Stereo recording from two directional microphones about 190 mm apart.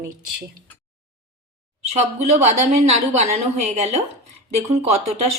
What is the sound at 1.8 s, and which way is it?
A woman's voice, 35° right (ahead or behind).